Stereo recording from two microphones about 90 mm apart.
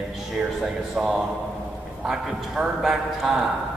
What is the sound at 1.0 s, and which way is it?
A man's voice, centre (ahead or behind).